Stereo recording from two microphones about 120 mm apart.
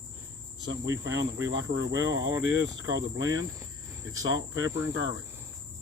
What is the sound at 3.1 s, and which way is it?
Cricket, 30° right (ahead or behind).